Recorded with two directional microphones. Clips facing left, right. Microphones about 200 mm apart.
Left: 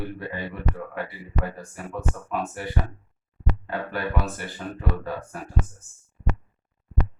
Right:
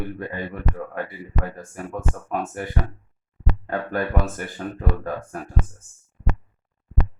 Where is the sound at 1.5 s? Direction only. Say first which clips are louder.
Right 2 dB; 50° right (ahead or behind).